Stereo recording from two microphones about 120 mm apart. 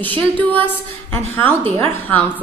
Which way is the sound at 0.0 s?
15° left (ahead or behind).